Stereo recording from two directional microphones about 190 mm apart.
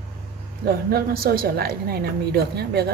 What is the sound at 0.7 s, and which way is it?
A woman's voice, 55° right (ahead or behind).